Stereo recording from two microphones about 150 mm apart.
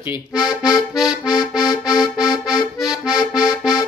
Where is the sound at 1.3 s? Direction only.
25° left (ahead or behind).